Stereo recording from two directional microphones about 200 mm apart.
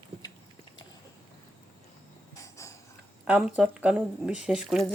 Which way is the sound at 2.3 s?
15° left (ahead or behind).